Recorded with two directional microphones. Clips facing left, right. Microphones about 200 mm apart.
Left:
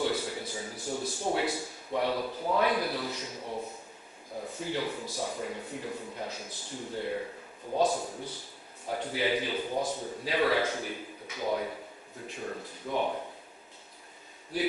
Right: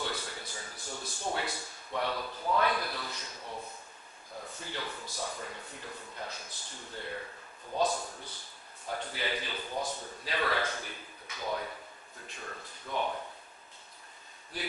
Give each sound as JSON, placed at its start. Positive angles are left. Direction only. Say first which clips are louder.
{"t": 0.0, "sound": "a sound", "louder": "left 7 dB", "side_deg": 10}
{"t": 2.0, "sound": "a man's voice", "louder": "left 5 dB", "side_deg": 10}
{"t": 3.4, "sound": "a sound", "louder": "left 5 dB", "side_deg": 30}
{"t": 4.4, "sound": "a man's voice", "louder": "left 8 dB", "side_deg": 10}
{"t": 7.9, "sound": "a man's voice", "louder": "left 4 dB", "side_deg": 25}
{"t": 8.8, "sound": "a man's voice", "louder": "left 6 dB", "side_deg": 10}